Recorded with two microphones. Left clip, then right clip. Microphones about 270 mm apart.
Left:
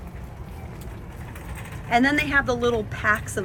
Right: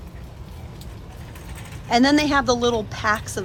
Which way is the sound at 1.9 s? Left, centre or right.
Centre.